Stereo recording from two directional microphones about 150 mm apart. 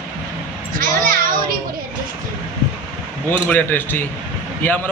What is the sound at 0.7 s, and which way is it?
Speech, 65° right (ahead or behind).